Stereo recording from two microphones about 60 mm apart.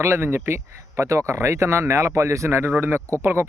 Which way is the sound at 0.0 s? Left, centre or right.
Right.